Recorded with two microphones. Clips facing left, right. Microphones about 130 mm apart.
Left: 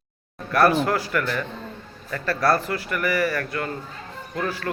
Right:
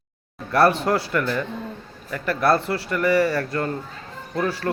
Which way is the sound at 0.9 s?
25° right (ahead or behind).